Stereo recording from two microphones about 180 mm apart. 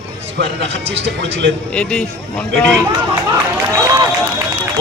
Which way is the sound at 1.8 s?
5° left (ahead or behind).